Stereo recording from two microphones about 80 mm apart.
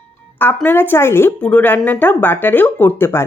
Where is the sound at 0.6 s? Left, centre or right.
Left.